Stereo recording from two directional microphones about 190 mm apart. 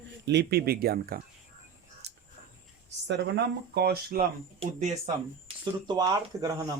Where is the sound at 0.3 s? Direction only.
60° right (ahead or behind).